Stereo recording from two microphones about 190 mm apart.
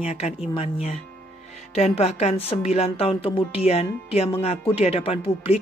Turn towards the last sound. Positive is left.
turn(degrees=30)  # may be behind; listen again after turning